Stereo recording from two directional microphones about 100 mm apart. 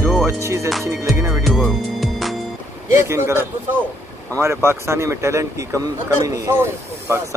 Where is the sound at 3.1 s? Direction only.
25° right (ahead or behind).